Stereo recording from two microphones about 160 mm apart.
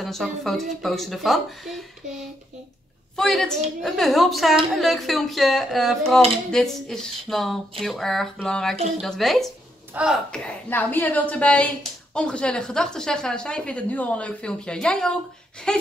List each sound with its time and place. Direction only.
0.0 s a woman's voice: centre (ahead or behind)
3.2 s a woman's voice: centre (ahead or behind)